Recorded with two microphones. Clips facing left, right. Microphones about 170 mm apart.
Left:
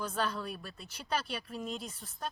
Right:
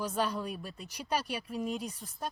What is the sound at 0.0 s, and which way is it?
Speech, 15° right (ahead or behind).